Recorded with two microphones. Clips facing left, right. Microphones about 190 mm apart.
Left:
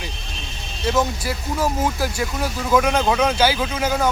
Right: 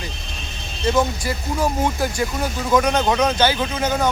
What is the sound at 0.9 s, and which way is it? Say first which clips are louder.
Speech: right 1 dB; 5° left (ahead or behind).